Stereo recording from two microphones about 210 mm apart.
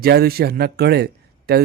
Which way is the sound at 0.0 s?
50° right (ahead or behind).